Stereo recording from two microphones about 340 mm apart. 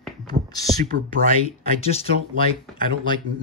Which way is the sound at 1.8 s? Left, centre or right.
Centre.